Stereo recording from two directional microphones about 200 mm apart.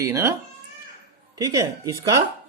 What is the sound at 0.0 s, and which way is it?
Speech, 15° right (ahead or behind).